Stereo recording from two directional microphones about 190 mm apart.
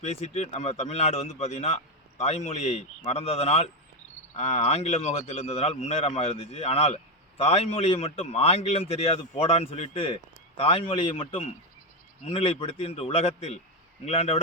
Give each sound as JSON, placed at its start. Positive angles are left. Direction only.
{"t": 0.0, "sound": "a man's voice", "side_deg": 35}